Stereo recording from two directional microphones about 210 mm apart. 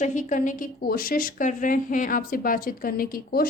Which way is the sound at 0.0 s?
35° left (ahead or behind).